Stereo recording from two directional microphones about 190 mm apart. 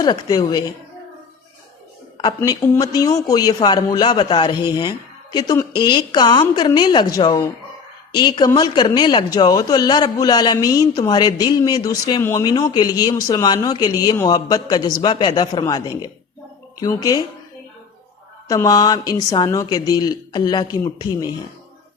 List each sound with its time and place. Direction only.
0.0 s speech: 20° left (ahead or behind)
2.1 s speech: 20° left (ahead or behind)
18.4 s speech: 20° left (ahead or behind)